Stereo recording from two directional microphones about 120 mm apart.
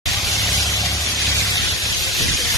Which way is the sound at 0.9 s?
25° left (ahead or behind).